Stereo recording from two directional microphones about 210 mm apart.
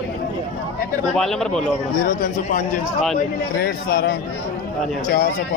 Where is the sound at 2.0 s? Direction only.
40° left (ahead or behind).